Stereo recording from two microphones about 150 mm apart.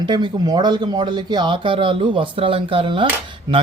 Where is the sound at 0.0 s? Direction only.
30° right (ahead or behind).